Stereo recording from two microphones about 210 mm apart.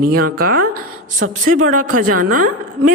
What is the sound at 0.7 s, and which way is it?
Speech, 90° right.